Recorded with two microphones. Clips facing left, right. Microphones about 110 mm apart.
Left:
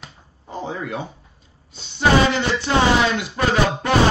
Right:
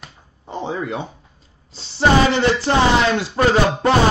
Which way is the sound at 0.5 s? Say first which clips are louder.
Right 3 dB; 25° right (ahead or behind).